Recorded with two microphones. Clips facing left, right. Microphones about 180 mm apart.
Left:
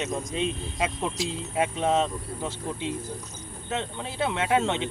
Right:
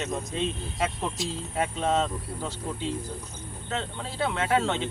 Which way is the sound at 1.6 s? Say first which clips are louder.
Left 2 dB; 15° left (ahead or behind).